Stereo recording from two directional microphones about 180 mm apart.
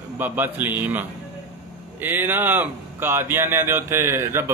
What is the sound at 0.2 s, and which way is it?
Speech, 10° right (ahead or behind).